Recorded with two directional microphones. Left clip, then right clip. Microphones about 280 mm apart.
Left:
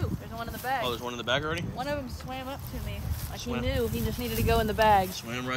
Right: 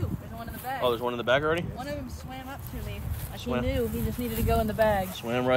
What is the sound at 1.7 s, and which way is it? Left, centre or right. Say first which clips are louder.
Speech: left 3 dB; centre.